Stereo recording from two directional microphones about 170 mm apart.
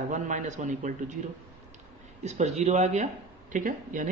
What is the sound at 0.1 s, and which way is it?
Speech, 45° right (ahead or behind).